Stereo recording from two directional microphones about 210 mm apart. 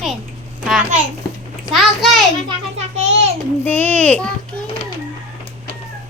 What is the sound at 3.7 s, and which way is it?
Speech, 10° left (ahead or behind).